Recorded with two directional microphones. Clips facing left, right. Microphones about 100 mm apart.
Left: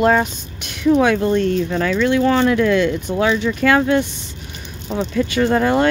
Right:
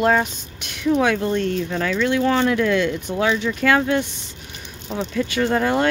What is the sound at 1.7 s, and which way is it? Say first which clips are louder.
Speech: left 4 dB; 50° left (ahead or behind).